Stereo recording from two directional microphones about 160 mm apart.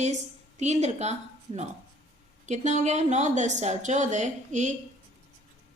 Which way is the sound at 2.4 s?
45° right (ahead or behind).